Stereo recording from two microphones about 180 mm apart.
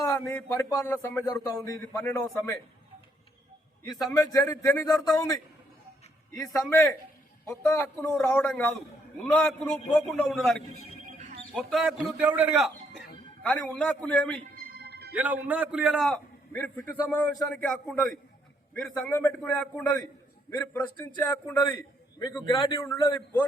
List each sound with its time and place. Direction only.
0.0 s speech: 15° left (ahead or behind)
3.8 s a man's voice: 20° left (ahead or behind); by 10.4 s centre (ahead or behind)
11.5 s a man's voice: centre (ahead or behind)
13.4 s speech: 10° left (ahead or behind)
14.6 s music: 65° right (ahead or behind)
15.1 s a man's voice: 10° right (ahead or behind); by 23.5 s 15° left (ahead or behind)